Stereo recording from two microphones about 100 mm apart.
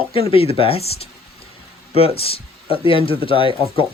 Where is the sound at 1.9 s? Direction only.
75° left (ahead or behind).